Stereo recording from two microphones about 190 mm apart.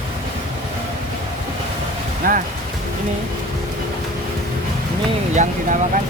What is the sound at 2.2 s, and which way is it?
Speech, 50° right (ahead or behind).